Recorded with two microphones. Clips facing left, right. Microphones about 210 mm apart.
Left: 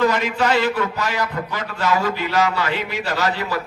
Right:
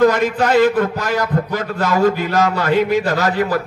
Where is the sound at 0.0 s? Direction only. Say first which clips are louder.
Right 5 dB; 50° right (ahead or behind).